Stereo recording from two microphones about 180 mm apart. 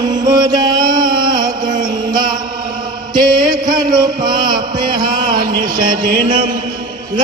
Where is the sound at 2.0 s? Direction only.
25° right (ahead or behind).